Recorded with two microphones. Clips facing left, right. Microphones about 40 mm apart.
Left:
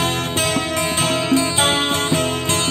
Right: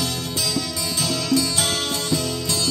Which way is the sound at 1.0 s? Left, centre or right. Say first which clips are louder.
Left 2 dB; left.